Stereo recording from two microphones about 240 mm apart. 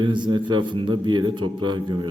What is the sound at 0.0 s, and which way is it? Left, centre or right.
A man's voice, centre.